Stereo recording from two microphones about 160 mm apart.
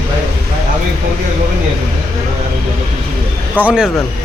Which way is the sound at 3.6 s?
5° right (ahead or behind).